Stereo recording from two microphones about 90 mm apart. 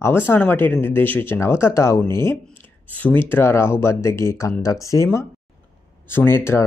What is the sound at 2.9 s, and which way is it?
Speech, 20° left (ahead or behind).